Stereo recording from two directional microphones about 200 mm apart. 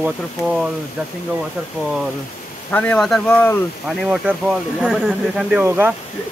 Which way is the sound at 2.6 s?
10° left (ahead or behind).